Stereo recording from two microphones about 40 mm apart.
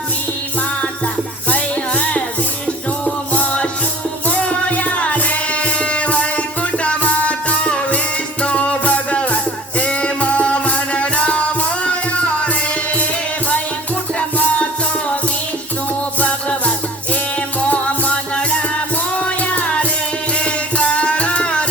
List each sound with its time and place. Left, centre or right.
1.5 s music: left
3.3 s music: left
14.2 s music: left
17.7 s music: left
19.1 s music: left